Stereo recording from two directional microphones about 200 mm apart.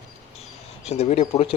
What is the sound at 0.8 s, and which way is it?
Speech, 30° left (ahead or behind).